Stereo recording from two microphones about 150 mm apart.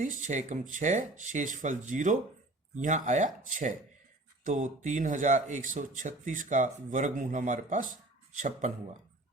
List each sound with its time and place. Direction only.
0.0 s speech: 55° right (ahead or behind)